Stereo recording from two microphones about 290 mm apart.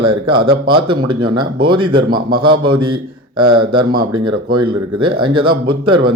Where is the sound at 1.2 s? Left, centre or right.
Centre.